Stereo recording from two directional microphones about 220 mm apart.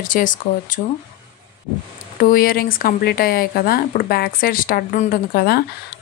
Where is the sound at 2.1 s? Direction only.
40° left (ahead or behind).